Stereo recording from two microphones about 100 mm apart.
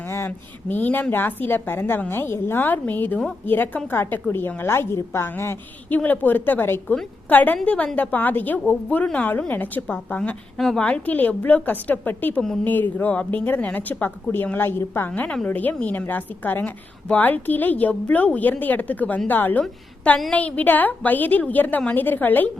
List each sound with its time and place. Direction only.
0.0 s a woman's voice: 25° left (ahead or behind)